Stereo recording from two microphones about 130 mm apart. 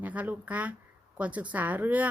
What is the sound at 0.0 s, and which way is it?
A woman's voice, 10° right (ahead or behind).